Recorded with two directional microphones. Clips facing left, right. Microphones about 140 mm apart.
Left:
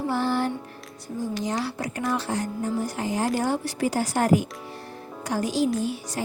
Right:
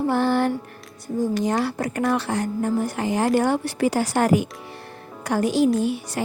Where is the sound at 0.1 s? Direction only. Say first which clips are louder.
Right 4 dB; 60° right (ahead or behind).